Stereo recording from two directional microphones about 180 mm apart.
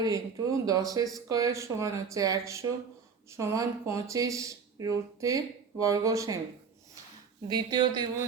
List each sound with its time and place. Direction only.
0.0 s speech: 20° right (ahead or behind)
7.4 s speech: 25° right (ahead or behind)